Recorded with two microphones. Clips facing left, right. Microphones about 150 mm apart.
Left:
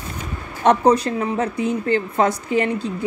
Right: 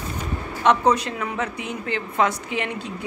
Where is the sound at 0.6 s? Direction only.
35° left (ahead or behind).